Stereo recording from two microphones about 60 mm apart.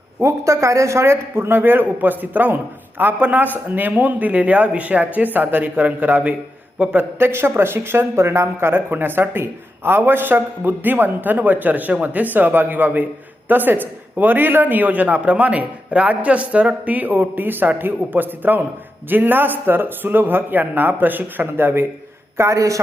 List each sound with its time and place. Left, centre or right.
0.2 s a man's voice: right
22.4 s a man's voice: right